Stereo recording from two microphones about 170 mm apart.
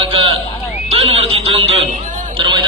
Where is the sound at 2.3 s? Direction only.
30° right (ahead or behind).